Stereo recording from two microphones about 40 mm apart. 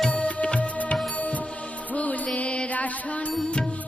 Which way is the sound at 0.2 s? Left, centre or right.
Left.